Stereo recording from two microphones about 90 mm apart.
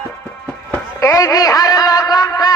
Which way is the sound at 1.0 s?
35° left (ahead or behind).